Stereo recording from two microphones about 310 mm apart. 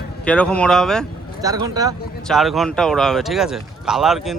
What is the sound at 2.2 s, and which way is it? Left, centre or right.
Speech, centre.